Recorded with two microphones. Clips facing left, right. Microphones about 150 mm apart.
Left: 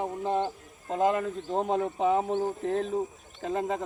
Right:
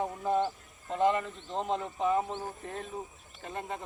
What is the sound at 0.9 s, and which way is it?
Speech, 40° left (ahead or behind).